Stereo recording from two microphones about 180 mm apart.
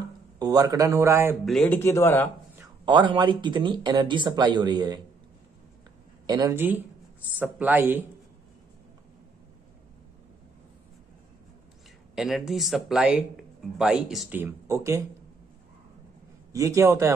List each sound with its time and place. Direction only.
0.4 s a man's voice: 20° right (ahead or behind)
1.4 s speech: 5° left (ahead or behind)
2.8 s speech: 25° right (ahead or behind)
6.2 s a man's voice: 20° right (ahead or behind)
12.2 s speech: centre (ahead or behind)
14.4 s a man's voice: 15° right (ahead or behind)
16.5 s a man's voice: 15° right (ahead or behind)